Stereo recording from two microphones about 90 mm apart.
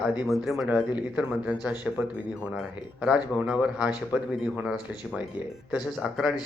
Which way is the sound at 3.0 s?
10° right (ahead or behind).